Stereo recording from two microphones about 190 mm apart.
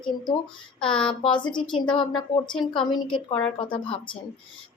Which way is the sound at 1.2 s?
25° left (ahead or behind).